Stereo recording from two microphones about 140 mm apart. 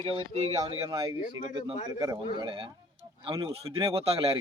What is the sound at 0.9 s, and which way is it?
Speech, 30° right (ahead or behind).